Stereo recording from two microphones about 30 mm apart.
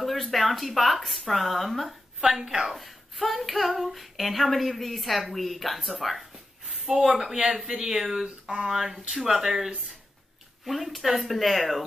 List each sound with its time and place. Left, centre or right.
0.0 s female singing: centre
2.2 s speech: right
2.7 s female singing: centre
5.9 s a sound: centre
7.6 s speech: right
10.6 s female singing: centre